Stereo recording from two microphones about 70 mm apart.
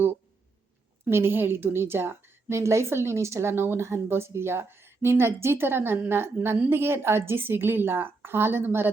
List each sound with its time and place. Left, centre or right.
1.1 s a woman's voice: right